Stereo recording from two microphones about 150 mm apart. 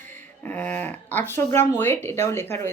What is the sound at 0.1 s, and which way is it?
Speech, 10° left (ahead or behind).